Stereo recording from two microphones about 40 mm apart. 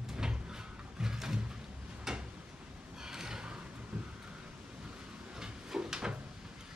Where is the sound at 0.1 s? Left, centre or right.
Centre.